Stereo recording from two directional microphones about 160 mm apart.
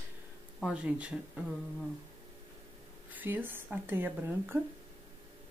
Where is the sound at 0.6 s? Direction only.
5° right (ahead or behind).